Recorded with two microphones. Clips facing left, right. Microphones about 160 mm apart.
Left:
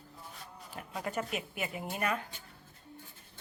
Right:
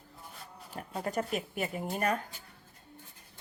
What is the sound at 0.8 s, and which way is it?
Speech, 40° right (ahead or behind).